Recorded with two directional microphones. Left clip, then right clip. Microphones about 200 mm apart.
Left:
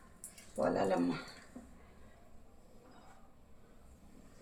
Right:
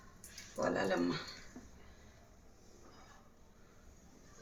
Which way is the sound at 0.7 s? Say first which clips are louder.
Left 2 dB; 20° left (ahead or behind).